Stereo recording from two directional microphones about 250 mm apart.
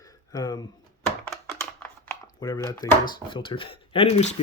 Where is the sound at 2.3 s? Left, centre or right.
Centre.